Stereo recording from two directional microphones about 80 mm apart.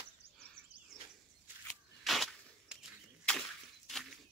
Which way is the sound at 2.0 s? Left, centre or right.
Centre.